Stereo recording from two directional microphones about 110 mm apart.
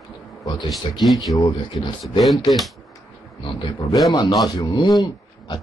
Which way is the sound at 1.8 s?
55° left (ahead or behind).